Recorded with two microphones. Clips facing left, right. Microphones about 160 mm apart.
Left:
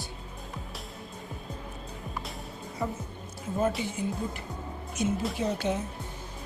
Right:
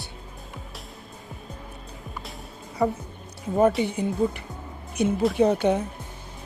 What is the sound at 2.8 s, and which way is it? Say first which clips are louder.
Speech: right 9 dB; 70° right (ahead or behind).